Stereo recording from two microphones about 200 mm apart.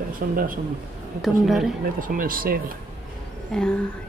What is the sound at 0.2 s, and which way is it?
Speech, 45° right (ahead or behind).